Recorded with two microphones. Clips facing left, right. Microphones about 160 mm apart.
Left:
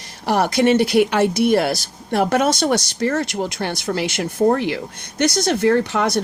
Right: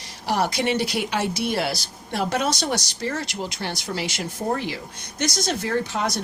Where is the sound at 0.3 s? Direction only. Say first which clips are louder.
Left 7 dB; 55° left (ahead or behind).